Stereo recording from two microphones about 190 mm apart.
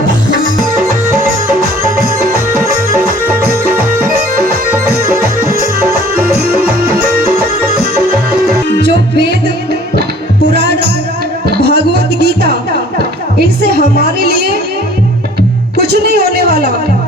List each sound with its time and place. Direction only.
4.7 s music: 15° right (ahead or behind)
8.8 s music: 65° right (ahead or behind)
10.5 s music: 60° right (ahead or behind)
13.6 s music: 55° right (ahead or behind)
15.9 s a sound: 60° right (ahead or behind)